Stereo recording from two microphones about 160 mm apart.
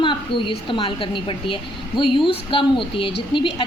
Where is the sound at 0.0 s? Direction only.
30° left (ahead or behind).